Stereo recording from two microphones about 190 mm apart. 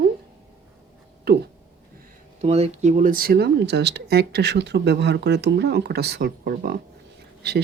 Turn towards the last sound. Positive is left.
turn(degrees=-60)  # may be behind; listen again after turning